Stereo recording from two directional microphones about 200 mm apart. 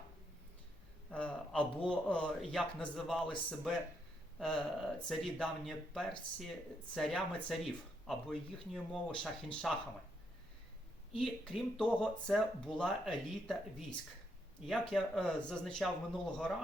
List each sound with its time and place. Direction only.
1.1 s a sound: 5° left (ahead or behind)
1.9 s speech: 5° left (ahead or behind)
11.1 s speech: centre (ahead or behind)